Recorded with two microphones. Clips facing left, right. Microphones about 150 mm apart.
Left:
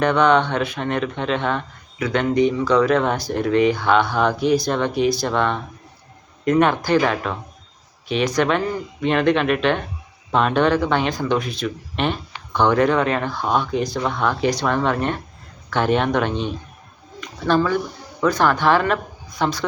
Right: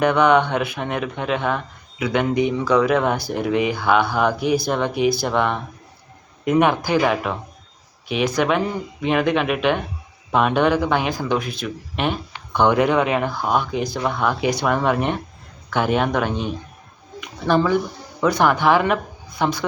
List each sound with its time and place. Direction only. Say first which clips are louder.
0.0 s speech: right 1 dB; 10° right (ahead or behind)
8.4 s speech: even; 10° right (ahead or behind)